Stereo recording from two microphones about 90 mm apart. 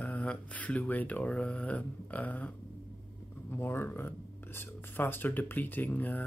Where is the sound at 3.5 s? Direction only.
25° left (ahead or behind).